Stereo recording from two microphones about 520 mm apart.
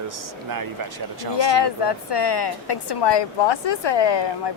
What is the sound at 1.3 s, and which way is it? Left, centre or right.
A woman's voice, left.